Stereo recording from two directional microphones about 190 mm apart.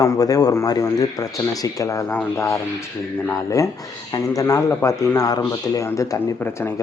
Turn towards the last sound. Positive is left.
turn(degrees=15)  # may be behind; listen again after turning